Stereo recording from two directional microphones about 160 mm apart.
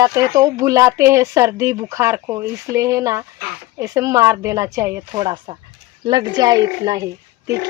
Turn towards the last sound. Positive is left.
turn(degrees=-20)  # may be behind; listen again after turning